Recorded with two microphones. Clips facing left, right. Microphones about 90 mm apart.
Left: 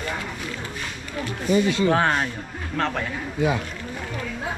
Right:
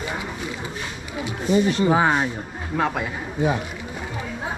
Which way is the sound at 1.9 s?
10° right (ahead or behind).